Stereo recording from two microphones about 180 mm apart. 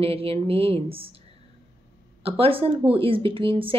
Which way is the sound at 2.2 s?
30° right (ahead or behind).